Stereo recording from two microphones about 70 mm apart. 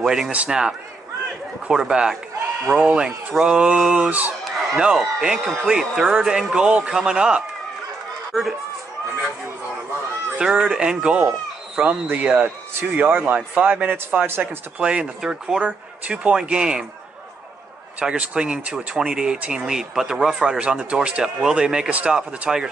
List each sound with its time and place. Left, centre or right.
0.0 s a man's voice: centre
2.6 s speech: right
8.3 s speech: centre
10.3 s speech: centre; by 14.5 s right
14.8 s speech: centre
17.9 s speech: centre